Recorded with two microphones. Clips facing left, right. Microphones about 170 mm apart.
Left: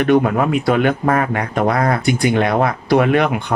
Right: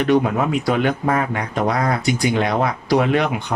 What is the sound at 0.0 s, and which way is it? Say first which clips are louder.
Speech: left 3 dB; 60° left (ahead or behind).